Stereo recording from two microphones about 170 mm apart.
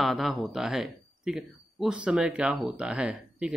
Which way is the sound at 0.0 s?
Centre (ahead or behind).